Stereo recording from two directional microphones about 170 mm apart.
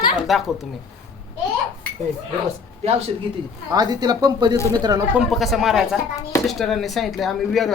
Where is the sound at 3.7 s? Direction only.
20° right (ahead or behind).